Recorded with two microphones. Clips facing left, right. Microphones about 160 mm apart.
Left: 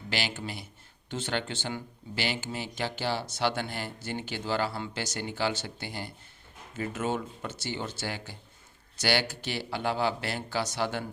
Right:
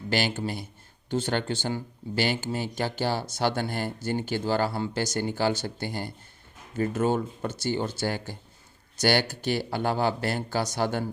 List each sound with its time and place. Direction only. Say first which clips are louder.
0.1 s speech: right 6 dB; 45° right (ahead or behind)